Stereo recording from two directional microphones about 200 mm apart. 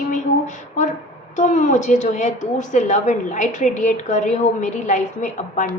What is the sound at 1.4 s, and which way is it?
A woman's voice, 40° left (ahead or behind).